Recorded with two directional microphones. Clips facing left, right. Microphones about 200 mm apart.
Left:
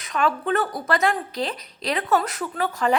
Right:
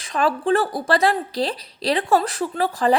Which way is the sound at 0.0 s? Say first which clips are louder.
Right 3 dB; 30° right (ahead or behind).